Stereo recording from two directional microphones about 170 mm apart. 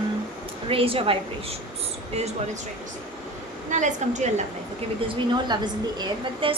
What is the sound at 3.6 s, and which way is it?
Speech, 45° right (ahead or behind).